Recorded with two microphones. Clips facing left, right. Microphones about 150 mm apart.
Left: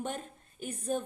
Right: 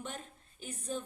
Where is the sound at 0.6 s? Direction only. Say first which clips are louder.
Left 6 dB; 55° left (ahead or behind).